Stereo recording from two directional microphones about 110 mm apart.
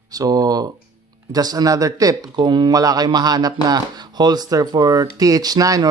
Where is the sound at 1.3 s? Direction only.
35° right (ahead or behind).